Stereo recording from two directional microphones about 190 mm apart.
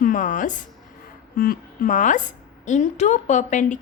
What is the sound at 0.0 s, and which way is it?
A woman's voice, 45° left (ahead or behind).